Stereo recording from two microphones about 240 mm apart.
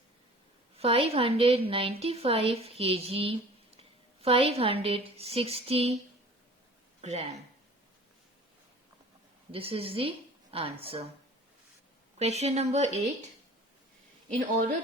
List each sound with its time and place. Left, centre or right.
0.8 s a woman's voice: right
7.0 s speech: right
9.5 s a woman's voice: right
12.2 s a woman's voice: right